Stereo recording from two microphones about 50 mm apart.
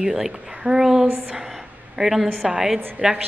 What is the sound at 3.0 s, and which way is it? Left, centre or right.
Speech, right.